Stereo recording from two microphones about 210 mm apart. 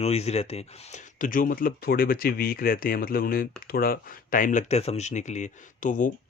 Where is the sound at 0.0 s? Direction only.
30° left (ahead or behind).